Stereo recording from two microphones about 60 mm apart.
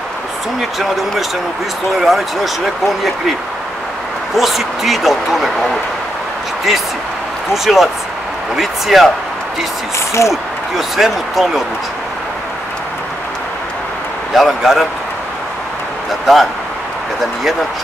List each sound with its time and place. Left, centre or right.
0.6 s speech: centre
4.4 s speech: centre
7.5 s speech: centre
9.9 s speech: left
10.8 s speech: centre
14.3 s speech: centre
16.1 s speech: centre